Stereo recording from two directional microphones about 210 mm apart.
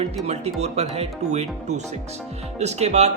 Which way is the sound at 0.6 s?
30° right (ahead or behind).